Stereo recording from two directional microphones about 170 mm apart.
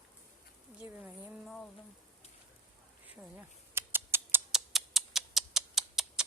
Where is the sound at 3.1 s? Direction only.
10° right (ahead or behind).